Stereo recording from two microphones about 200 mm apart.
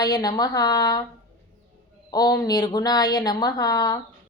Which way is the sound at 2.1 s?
20° left (ahead or behind).